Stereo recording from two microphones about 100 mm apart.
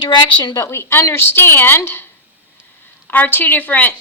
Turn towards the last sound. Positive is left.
turn(degrees=15)  # may be behind; listen again after turning